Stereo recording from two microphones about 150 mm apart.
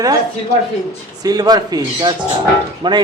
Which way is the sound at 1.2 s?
25° right (ahead or behind).